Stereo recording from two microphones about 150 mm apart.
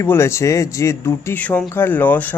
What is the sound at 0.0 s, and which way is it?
Speech, 20° left (ahead or behind).